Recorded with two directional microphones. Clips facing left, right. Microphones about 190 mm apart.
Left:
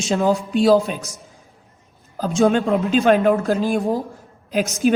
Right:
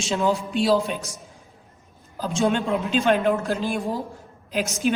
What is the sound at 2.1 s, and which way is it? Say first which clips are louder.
A man's voice: left 6 dB; 45° left (ahead or behind).